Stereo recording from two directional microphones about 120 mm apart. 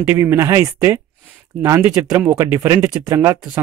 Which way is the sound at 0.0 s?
15° right (ahead or behind).